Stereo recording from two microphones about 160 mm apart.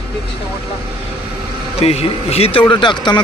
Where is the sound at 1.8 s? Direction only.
40° left (ahead or behind).